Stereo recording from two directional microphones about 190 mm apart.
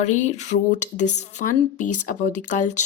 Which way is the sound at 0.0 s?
40° left (ahead or behind).